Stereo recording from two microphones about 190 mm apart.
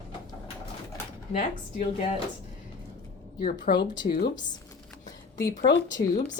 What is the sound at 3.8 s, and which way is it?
Speech, 25° left (ahead or behind).